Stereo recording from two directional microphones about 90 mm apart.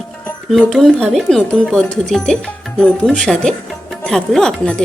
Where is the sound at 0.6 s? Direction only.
5° left (ahead or behind).